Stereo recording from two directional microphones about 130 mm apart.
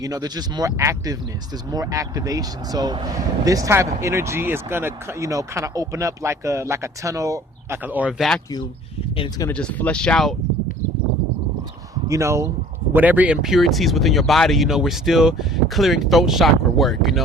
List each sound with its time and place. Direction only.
0.0 s speech: 30° right (ahead or behind)
8.2 s speech: centre (ahead or behind)
9.5 s speech: 10° left (ahead or behind)
12.0 s speech: 25° right (ahead or behind)
12.9 s speech: 15° right (ahead or behind)